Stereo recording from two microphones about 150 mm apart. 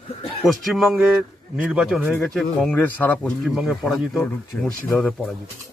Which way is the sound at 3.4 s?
5° right (ahead or behind).